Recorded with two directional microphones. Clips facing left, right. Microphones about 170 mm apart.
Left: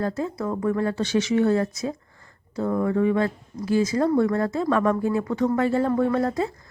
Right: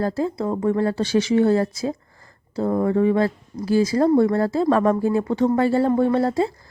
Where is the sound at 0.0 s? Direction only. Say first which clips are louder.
Right 4 dB; 30° right (ahead or behind).